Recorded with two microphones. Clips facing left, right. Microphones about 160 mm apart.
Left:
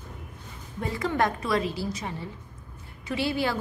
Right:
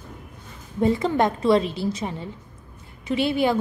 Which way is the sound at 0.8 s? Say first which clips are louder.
Right 6 dB; 25° right (ahead or behind).